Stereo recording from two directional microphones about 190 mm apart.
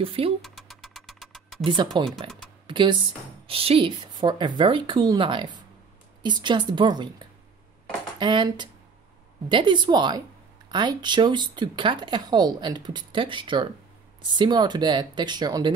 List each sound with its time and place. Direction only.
0.0 s speech: 30° right (ahead or behind)
0.4 s rodents: centre (ahead or behind)
1.6 s speech: 25° right (ahead or behind)
8.2 s speech: 25° right (ahead or behind)